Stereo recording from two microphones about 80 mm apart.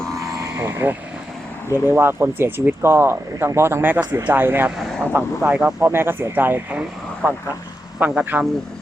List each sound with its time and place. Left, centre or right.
0.2 s vehicle: right
1.7 s speech: right
5.5 s speech: centre
5.8 s speech: right